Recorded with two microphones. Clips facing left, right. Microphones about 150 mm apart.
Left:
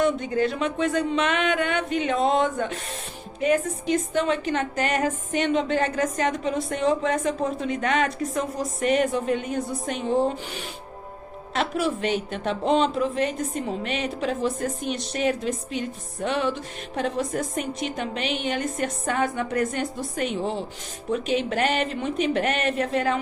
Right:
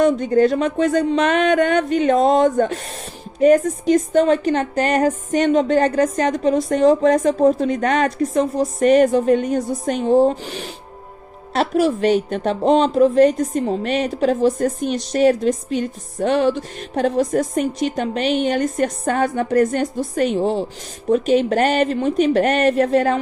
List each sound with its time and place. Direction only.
0.0 s a woman's voice: 40° right (ahead or behind)